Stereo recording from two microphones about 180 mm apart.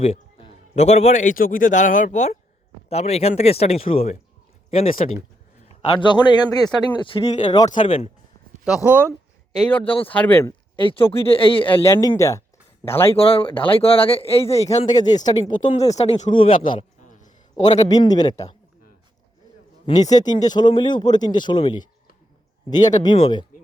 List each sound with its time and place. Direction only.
0.0 s a man's voice: 30° left (ahead or behind)
8.6 s speech: 5° right (ahead or behind)
9.6 s speech: 10° left (ahead or behind)
10.8 s a man's voice: 30° left (ahead or behind)
11.8 s speech: 15° left (ahead or behind)
13.1 s a man's voice: 30° left (ahead or behind)
14.8 s a man's voice: 25° left (ahead or behind)
15.7 s speech: 35° left (ahead or behind)
17.0 s a sound: 45° left (ahead or behind)
17.8 s a man's voice: 20° left (ahead or behind)
20.0 s speech: 40° left (ahead or behind)
20.2 s a man's voice: 25° left (ahead or behind)